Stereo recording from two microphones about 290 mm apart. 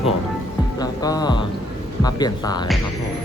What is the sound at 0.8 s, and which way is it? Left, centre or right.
Speech, centre.